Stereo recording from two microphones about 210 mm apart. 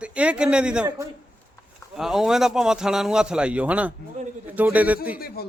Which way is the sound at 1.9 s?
Centre (ahead or behind).